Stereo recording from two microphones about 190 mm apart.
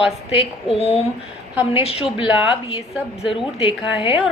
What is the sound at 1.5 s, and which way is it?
Speech, 10° right (ahead or behind).